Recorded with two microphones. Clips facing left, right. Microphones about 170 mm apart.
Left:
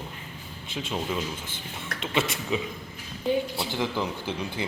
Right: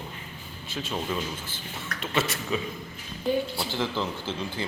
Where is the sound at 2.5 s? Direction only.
20° left (ahead or behind).